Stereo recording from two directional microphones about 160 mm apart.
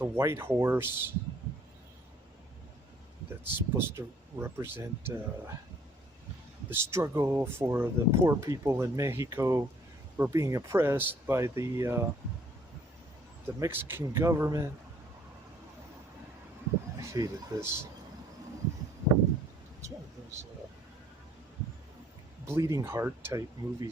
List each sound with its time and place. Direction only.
0.0 s speech: 15° right (ahead or behind)
3.4 s speech: 15° right (ahead or behind)
6.7 s speech: 15° right (ahead or behind)
13.6 s speech: 15° right (ahead or behind)
17.0 s speech: 20° right (ahead or behind)
22.4 s speech: 15° right (ahead or behind)